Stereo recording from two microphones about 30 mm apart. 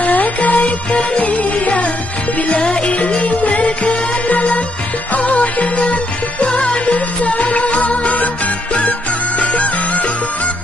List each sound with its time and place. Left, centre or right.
0.0 s music: left
3.6 s music: left
6.5 s music: left
9.4 s music: left